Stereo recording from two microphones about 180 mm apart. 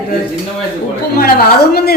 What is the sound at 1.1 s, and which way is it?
Speech, 55° left (ahead or behind).